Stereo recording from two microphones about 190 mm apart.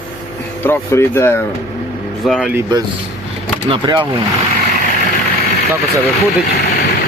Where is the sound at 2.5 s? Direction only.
15° right (ahead or behind).